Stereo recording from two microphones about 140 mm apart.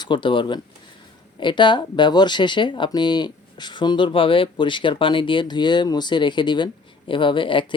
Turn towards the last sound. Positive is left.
turn(degrees=35)  # may be behind; listen again after turning